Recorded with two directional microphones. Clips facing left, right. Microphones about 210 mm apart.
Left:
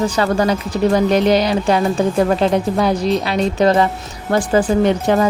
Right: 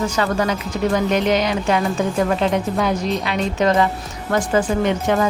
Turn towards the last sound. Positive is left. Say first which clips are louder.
# left 4 dB
turn(degrees=35)  # may be behind; listen again after turning